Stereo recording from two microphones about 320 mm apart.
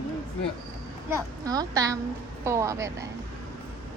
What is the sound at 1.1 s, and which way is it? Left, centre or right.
A woman's voice, centre.